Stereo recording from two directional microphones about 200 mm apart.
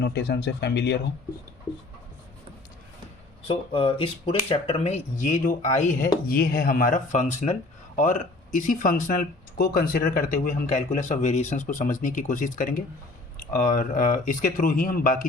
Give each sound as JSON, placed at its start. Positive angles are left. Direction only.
{"t": 0.0, "sound": "speech", "side_deg": 55}
{"t": 3.4, "sound": "speech", "side_deg": 25}